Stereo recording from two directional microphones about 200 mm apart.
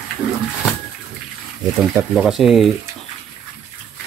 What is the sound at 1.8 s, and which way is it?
Speech, centre (ahead or behind).